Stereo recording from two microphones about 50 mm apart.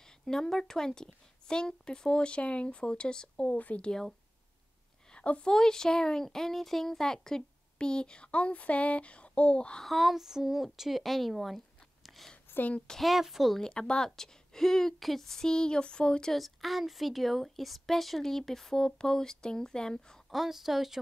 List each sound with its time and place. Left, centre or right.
0.2 s speech: centre; by 3.8 s left
3.8 s speech: centre
5.1 s a woman's voice: left
5.5 s speech: centre
9.8 s a woman's voice: centre
12.5 s a sound: left
13.0 s a woman's voice: centre
13.6 s speech: centre
16.3 s a woman's voice: centre
20.2 s a woman's voice: centre